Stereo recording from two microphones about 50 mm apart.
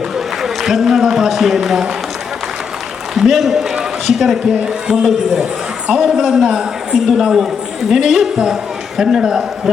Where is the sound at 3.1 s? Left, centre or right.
Centre.